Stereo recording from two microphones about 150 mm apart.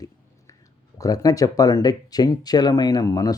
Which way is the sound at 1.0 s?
25° left (ahead or behind).